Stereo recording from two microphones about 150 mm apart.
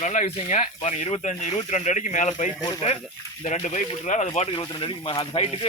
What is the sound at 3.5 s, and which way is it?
Speech, 55° left (ahead or behind).